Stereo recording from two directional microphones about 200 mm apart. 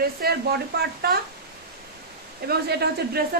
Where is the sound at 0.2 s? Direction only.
50° right (ahead or behind).